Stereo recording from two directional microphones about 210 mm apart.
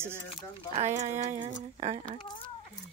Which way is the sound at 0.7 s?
35° right (ahead or behind).